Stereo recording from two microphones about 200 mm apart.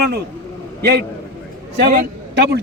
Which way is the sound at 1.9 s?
50° right (ahead or behind).